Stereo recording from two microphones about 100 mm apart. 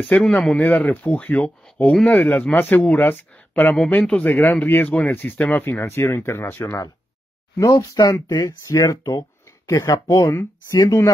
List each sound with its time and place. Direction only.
0.2 s speech: 5° left (ahead or behind); by 11.1 s 30° left (ahead or behind)